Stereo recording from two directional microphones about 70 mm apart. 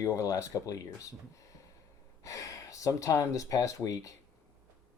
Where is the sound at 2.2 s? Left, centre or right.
Left.